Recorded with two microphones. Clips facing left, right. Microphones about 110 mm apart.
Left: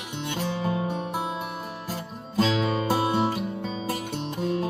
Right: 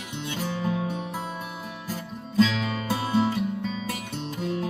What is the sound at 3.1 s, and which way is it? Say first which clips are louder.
Music: right 1 dB; 25° left (ahead or behind).